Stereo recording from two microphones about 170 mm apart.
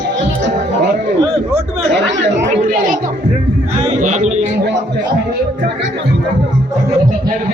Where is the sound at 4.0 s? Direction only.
45° right (ahead or behind).